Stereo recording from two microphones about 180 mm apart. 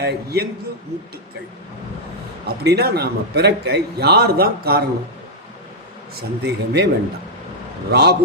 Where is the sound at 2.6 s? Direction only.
65° right (ahead or behind).